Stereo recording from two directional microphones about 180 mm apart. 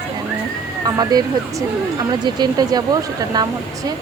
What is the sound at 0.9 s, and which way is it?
Speech, 20° right (ahead or behind).